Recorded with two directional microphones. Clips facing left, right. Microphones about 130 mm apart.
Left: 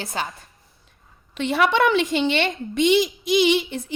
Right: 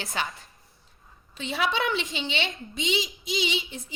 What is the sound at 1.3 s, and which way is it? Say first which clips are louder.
A woman's voice: left 8 dB; 65° left (ahead or behind).